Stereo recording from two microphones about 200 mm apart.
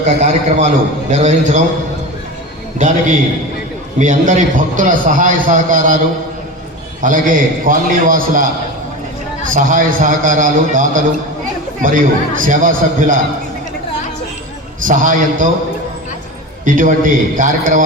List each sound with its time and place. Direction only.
0.2 s a man's voice: 35° right (ahead or behind)
2.7 s a man's voice: 40° right (ahead or behind)
7.0 s a man's voice: 40° right (ahead or behind)
9.6 s a man's voice: 40° right (ahead or behind)
14.8 s a man's voice: 40° right (ahead or behind)
16.6 s a man's voice: 40° right (ahead or behind)